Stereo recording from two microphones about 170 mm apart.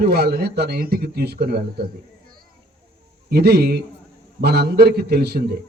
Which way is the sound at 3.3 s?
70° right (ahead or behind).